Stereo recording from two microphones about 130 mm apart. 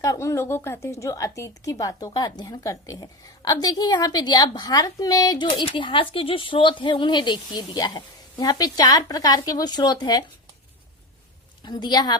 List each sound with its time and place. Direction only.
0.0 s speech: 25° left (ahead or behind)
5.5 s speech: 40° left (ahead or behind)
11.6 s speech: 35° left (ahead or behind)